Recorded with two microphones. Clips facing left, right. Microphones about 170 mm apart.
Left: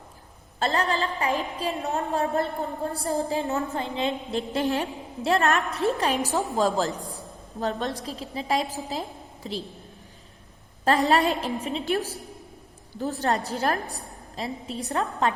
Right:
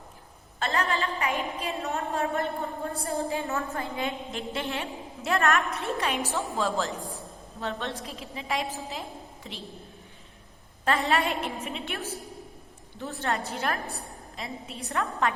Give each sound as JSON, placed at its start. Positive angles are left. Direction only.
{"t": 0.6, "sound": "a woman's voice", "side_deg": 35}
{"t": 3.5, "sound": "a woman's voice", "side_deg": 20}
{"t": 10.8, "sound": "a woman's voice", "side_deg": 35}